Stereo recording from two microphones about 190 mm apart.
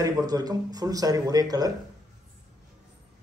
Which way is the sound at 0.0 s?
20° right (ahead or behind).